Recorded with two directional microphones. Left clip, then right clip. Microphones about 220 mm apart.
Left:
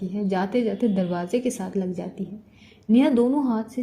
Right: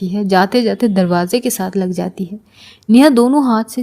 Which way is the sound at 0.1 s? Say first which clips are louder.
Right 12 dB; 35° right (ahead or behind).